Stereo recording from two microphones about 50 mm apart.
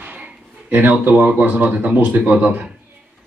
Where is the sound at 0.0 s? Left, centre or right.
Right.